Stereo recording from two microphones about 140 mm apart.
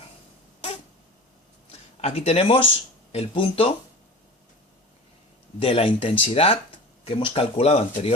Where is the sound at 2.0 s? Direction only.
50° left (ahead or behind).